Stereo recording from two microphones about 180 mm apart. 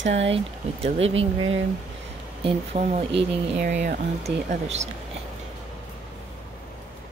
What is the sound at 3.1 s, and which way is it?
Speech, 70° right (ahead or behind).